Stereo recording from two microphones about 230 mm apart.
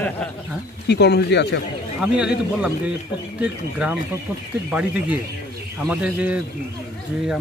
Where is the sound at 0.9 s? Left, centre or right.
Left.